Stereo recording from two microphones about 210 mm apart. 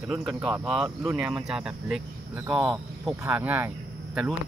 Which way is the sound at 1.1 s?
5° right (ahead or behind).